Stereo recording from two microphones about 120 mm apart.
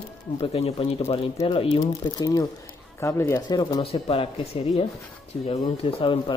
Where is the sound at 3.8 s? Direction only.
50° left (ahead or behind).